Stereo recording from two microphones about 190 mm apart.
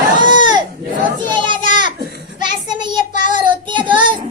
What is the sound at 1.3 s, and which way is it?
Children playing, 25° right (ahead or behind).